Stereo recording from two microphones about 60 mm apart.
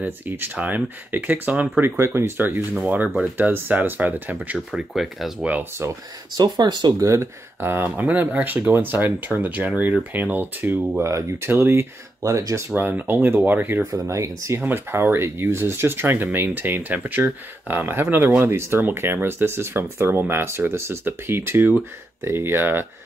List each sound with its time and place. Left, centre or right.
0.0 s speech: right
1.8 s speech: right
2.3 s speech: right
4.7 s speech: centre
5.6 s speech: right
7.0 s speech: right
7.6 s speech: right
7.9 s speech: right
11.0 s speech: right
12.2 s speech: right
12.6 s speech: right
13.8 s speech: right
14.6 s speech: right
16.3 s speech: right